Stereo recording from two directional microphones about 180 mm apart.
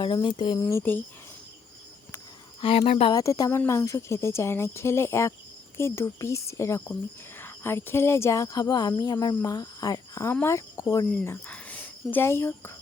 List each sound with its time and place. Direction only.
0.0 s speech: 25° left (ahead or behind)
0.8 s speech: 10° left (ahead or behind)
2.6 s speech: 35° left (ahead or behind)
3.2 s speech: 20° left (ahead or behind)